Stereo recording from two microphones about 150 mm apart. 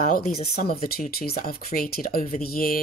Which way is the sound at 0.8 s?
90° left.